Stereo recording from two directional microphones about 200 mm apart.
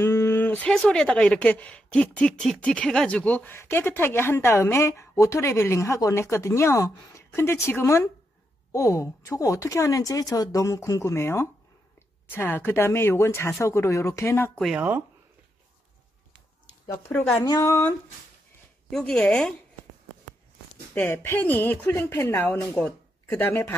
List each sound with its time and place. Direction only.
0.0 s speech: 10° left (ahead or behind)
14.6 s speech: 5° right (ahead or behind)
17.1 s speech: 10° left (ahead or behind)
20.9 s speech: 10° left (ahead or behind)